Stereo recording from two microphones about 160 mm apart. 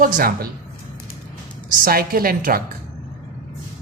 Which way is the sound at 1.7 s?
65° right (ahead or behind).